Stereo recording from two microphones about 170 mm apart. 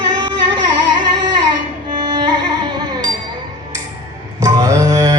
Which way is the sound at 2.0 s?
25° right (ahead or behind).